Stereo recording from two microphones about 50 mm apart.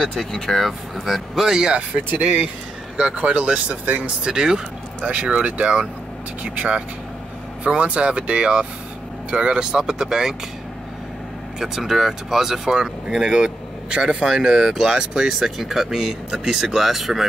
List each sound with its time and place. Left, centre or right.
0.3 s speech: centre
2.0 s speech: right
5.0 s speech: right
11.6 s speech: centre